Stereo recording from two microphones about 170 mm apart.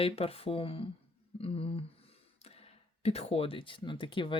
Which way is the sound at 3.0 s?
40° left (ahead or behind).